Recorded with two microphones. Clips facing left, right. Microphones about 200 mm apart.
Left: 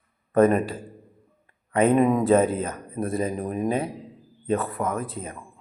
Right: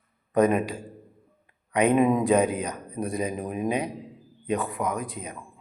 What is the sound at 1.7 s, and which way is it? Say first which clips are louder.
Speech: left 2 dB; 15° right (ahead or behind).